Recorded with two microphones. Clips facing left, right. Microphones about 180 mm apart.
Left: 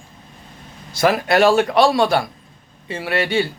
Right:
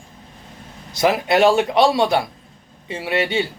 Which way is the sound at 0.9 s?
20° right (ahead or behind).